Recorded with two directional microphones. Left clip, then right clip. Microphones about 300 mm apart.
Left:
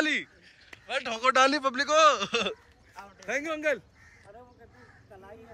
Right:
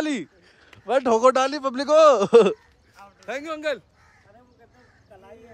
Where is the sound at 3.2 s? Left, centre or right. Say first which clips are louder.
Right 1 dB; centre.